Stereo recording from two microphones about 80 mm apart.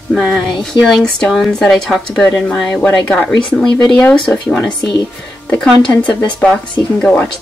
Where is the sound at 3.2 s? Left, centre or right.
Centre.